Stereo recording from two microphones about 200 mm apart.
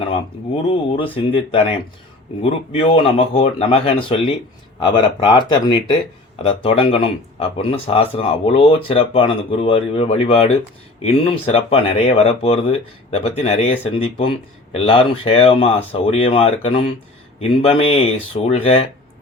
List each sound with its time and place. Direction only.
0.7 s speech: 25° left (ahead or behind)